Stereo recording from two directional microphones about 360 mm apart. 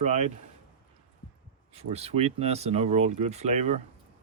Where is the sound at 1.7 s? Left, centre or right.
Centre.